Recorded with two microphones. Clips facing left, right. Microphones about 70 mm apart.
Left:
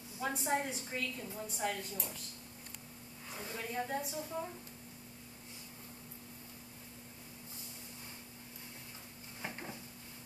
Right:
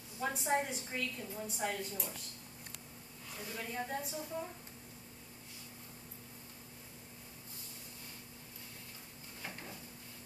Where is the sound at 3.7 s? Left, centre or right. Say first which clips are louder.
Left 3 dB; centre.